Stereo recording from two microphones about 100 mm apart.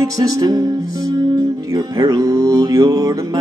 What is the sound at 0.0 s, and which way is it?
Music, 40° right (ahead or behind).